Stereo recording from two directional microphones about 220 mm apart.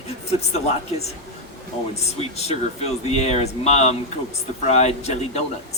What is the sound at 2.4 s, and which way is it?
Speech, 30° left (ahead or behind).